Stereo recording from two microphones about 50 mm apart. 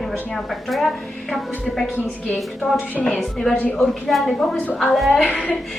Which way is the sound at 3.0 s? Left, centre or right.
Centre.